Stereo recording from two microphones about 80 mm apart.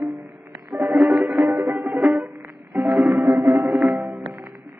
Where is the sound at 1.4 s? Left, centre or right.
Right.